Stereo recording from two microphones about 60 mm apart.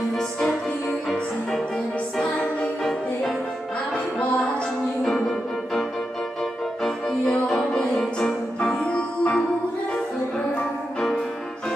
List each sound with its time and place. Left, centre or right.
0.1 s music: centre
2.8 s music: centre
6.8 s music: centre